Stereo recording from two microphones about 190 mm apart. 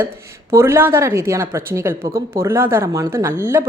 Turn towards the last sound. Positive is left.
turn(degrees=-15)  # may be behind; listen again after turning